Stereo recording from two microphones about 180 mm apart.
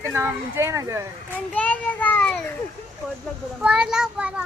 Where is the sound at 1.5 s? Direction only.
10° left (ahead or behind).